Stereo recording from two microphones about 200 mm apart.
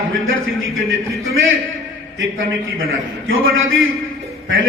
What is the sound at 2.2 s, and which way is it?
A man's voice, 80° right.